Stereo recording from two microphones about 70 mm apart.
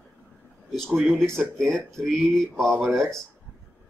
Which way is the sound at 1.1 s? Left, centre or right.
Centre.